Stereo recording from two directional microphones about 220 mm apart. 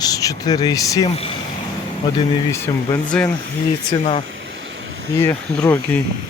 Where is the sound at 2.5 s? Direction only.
10° left (ahead or behind).